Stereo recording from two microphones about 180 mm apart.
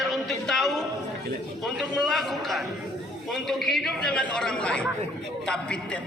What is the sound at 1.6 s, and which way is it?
A man's voice, centre (ahead or behind).